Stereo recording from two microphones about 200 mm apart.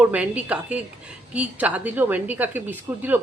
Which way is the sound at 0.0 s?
5° right (ahead or behind).